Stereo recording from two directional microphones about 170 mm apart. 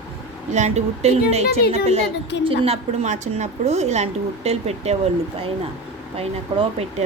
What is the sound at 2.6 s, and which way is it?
A woman's voice, 35° right (ahead or behind).